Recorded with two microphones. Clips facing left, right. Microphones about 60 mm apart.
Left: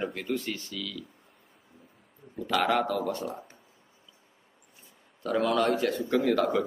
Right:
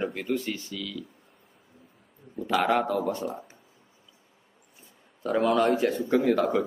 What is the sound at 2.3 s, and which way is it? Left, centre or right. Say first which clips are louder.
Speech: right 2 dB; centre.